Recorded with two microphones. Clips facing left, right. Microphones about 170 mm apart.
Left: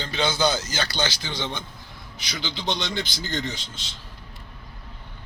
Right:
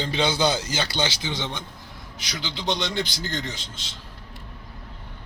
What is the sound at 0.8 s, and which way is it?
Speech, 25° right (ahead or behind).